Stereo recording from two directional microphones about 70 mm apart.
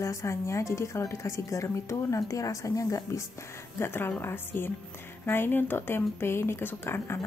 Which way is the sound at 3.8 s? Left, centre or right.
Left.